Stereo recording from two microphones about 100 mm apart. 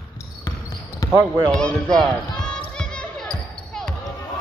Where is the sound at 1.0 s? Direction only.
35° left (ahead or behind).